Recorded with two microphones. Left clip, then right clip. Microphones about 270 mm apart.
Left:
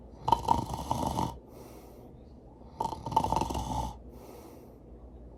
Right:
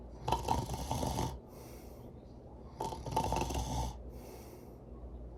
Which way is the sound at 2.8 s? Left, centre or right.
Centre.